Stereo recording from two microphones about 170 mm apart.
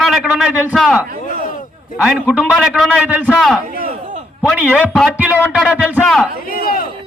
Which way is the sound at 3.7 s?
60° right (ahead or behind).